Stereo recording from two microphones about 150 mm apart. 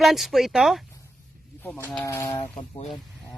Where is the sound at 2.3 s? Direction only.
30° left (ahead or behind).